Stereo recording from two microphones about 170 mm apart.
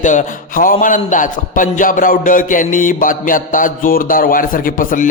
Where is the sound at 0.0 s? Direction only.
45° left (ahead or behind).